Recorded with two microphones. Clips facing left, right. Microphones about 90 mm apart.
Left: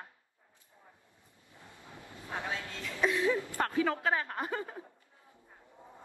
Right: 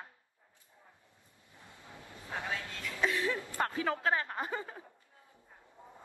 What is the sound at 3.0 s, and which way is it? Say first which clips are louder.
Speech: left 4 dB; 15° left (ahead or behind).